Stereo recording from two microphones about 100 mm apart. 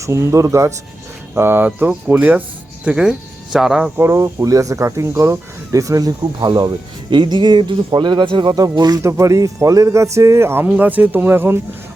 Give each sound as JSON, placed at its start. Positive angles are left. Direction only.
{"t": 0.0, "sound": "speech", "side_deg": -30}
{"t": 3.9, "sound": "speech", "side_deg": -25}
{"t": 8.5, "sound": "speech", "side_deg": -40}
{"t": 9.0, "sound": "speech", "side_deg": -30}